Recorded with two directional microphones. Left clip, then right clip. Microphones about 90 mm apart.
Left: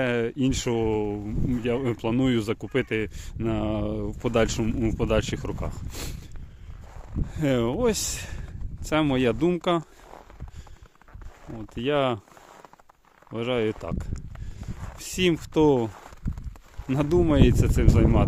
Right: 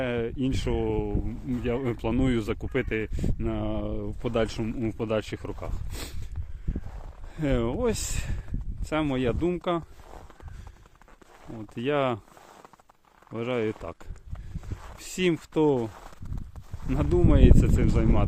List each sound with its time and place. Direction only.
0.0 s speech: 65° left (ahead or behind)
1.5 s speech: 35° left (ahead or behind); by 5.7 s 50° left (ahead or behind)
5.9 s speech: 30° left (ahead or behind)
7.3 s speech: 45° left (ahead or behind)
9.0 s speech: 70° left (ahead or behind)
11.7 s speech: 20° left (ahead or behind)
13.3 s speech: 30° left (ahead or behind)
14.9 s a sound: 25° left (ahead or behind)
15.5 s speech: 50° left (ahead or behind)
16.9 s speech: 55° left (ahead or behind)